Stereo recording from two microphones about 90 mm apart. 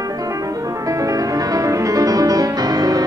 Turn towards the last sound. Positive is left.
turn(degrees=-45)  # may be behind; listen again after turning